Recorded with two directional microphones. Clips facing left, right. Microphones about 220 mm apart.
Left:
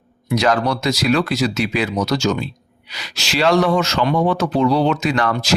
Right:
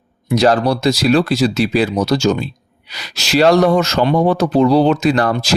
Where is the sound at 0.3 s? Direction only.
35° right (ahead or behind).